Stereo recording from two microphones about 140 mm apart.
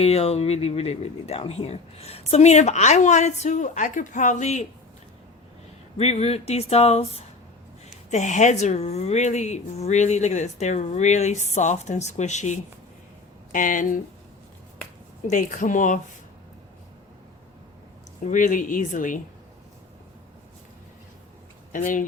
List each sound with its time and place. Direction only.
0.0 s speech: 50° left (ahead or behind)
6.0 s speech: 50° left (ahead or behind)
7.9 s a woman's voice: 60° left (ahead or behind)
13.5 s speech: 70° left (ahead or behind)
15.3 s speech: 70° left (ahead or behind)
18.3 s speech: 70° left (ahead or behind)
21.7 s speech: 70° left (ahead or behind)